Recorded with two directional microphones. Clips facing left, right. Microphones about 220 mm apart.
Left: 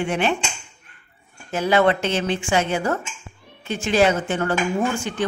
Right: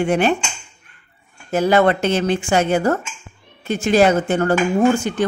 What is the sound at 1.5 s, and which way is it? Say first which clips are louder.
Speech: right 3 dB; 40° right (ahead or behind).